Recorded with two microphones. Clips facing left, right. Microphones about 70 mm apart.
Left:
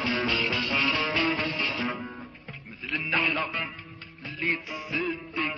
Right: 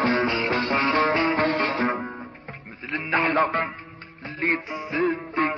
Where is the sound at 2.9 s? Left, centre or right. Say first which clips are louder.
Right 5 dB; right.